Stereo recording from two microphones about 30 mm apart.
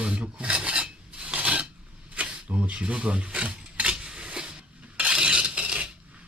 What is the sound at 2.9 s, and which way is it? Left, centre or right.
Stir, right.